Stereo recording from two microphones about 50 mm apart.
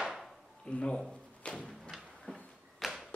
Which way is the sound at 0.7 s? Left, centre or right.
Centre.